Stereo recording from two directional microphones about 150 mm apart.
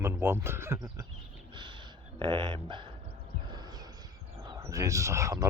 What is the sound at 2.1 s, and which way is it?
Speech, 30° right (ahead or behind).